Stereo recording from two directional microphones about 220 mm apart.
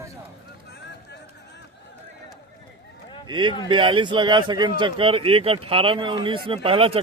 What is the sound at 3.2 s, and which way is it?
Speech, 20° right (ahead or behind).